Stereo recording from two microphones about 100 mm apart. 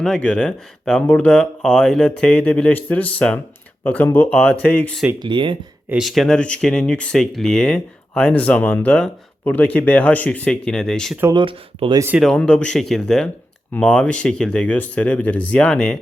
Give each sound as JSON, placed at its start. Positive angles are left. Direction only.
{"t": 0.0, "sound": "speech", "side_deg": 5}
{"t": 5.2, "sound": "speech", "side_deg": -55}
{"t": 6.0, "sound": "speech", "side_deg": 0}
{"t": 11.3, "sound": "speech", "side_deg": -60}
{"t": 12.3, "sound": "speech", "side_deg": 10}